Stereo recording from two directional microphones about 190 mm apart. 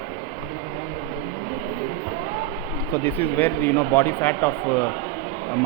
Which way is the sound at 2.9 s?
10° left (ahead or behind).